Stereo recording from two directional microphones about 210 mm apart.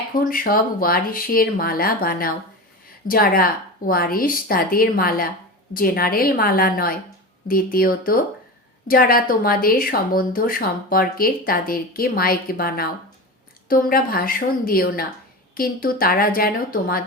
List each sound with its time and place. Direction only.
0.1 s speech: 45° left (ahead or behind)